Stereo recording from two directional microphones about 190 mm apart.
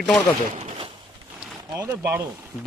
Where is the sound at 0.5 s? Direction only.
40° right (ahead or behind).